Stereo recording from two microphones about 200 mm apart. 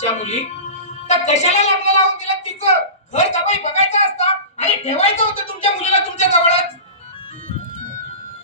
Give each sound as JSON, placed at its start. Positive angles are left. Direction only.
{"t": 0.0, "sound": "a woman's voice", "side_deg": 35}